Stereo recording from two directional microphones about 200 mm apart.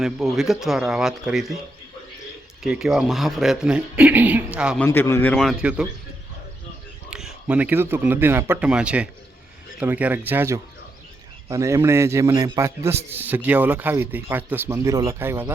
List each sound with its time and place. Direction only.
0.0 s a man's voice: centre (ahead or behind)
2.6 s a man's voice: centre (ahead or behind)
4.8 s a man's voice: 10° left (ahead or behind); by 5.9 s 5° right (ahead or behind)
7.1 s a man's voice: 5° right (ahead or behind)